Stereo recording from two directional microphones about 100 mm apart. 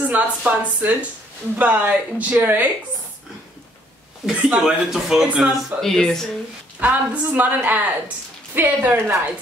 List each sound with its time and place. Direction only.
0.0 s speech: 15° right (ahead or behind)
4.3 s speech: 10° right (ahead or behind)
5.8 s speech: 5° left (ahead or behind)
6.8 s speech: 15° right (ahead or behind)